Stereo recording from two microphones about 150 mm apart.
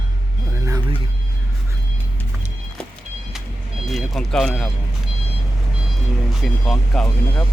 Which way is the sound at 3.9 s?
Centre (ahead or behind).